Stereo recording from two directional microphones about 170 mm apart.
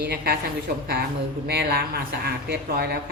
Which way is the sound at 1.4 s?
70° right (ahead or behind).